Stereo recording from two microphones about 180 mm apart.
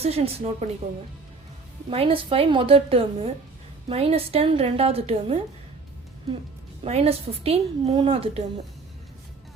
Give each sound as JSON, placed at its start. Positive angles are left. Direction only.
{"t": 0.0, "sound": "a woman's voice", "side_deg": -35}
{"t": 1.9, "sound": "a woman's voice", "side_deg": -30}
{"t": 6.8, "sound": "a woman's voice", "side_deg": -35}